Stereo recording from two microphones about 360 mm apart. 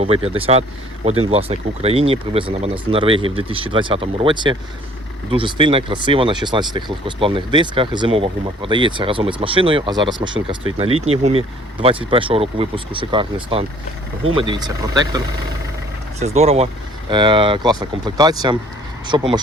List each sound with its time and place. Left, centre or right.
0.0 s speech: centre
16.2 s speech: centre